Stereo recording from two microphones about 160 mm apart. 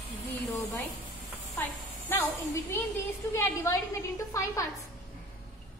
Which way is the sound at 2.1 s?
15° left (ahead or behind).